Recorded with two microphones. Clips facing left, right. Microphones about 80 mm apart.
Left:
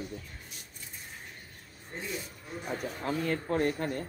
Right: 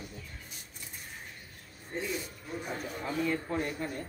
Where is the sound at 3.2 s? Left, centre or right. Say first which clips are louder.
Left 3 dB; left.